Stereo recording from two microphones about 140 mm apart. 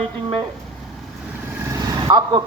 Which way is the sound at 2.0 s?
30° right (ahead or behind).